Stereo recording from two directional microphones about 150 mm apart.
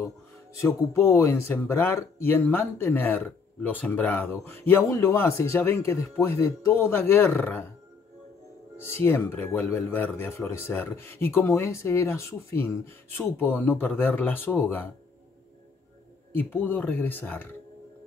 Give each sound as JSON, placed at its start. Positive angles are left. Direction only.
{"t": 0.6, "sound": "speech", "side_deg": 20}
{"t": 8.7, "sound": "speech", "side_deg": 15}
{"t": 16.3, "sound": "speech", "side_deg": 15}